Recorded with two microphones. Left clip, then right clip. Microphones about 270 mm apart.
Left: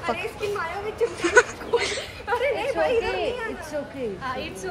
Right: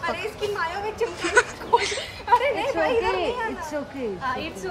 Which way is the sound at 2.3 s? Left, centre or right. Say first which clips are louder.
Right 4 dB; right.